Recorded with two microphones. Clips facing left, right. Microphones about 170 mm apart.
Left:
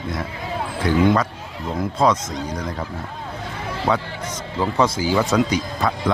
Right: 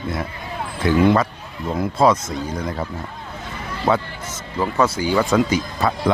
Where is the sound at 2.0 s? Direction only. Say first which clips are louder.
Right 2 dB; 10° right (ahead or behind).